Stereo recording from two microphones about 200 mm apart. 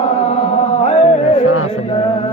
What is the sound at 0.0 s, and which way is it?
Chant, 30° left (ahead or behind).